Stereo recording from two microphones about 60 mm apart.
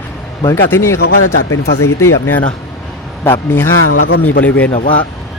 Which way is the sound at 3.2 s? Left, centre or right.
Left.